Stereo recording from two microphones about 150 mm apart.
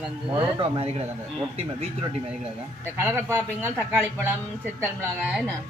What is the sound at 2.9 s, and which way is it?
Speech, 15° right (ahead or behind).